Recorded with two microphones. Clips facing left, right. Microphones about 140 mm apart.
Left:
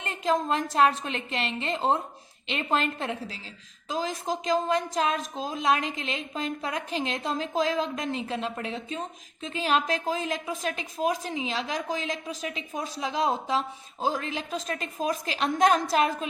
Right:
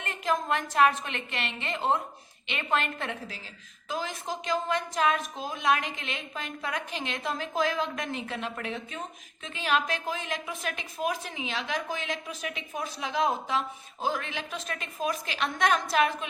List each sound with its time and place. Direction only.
0.0 s a woman's voice: 30° left (ahead or behind)